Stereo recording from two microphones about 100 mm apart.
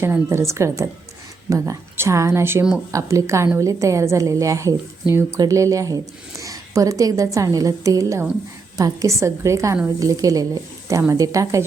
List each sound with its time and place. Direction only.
0.0 s a woman's voice: 25° right (ahead or behind)